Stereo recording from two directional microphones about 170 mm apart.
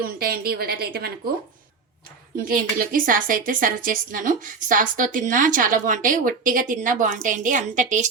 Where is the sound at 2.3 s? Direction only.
55° right (ahead or behind).